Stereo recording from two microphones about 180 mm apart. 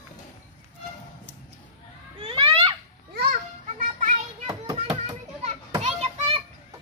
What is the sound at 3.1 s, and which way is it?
Children playing, 60° right (ahead or behind).